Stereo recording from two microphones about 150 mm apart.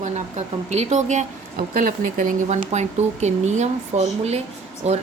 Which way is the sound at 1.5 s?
75° right (ahead or behind).